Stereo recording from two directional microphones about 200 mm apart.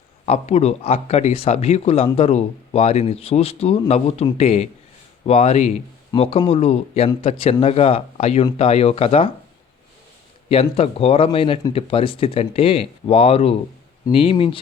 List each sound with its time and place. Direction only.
0.3 s speech: 30° left (ahead or behind)
10.5 s speech: 30° left (ahead or behind)